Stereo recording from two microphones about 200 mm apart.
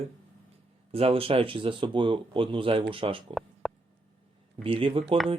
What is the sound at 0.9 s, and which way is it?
Speech, 30° right (ahead or behind).